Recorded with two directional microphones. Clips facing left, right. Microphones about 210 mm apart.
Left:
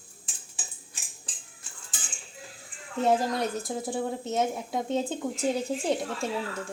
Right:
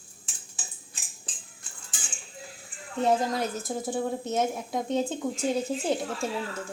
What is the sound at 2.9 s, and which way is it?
Speech, centre (ahead or behind).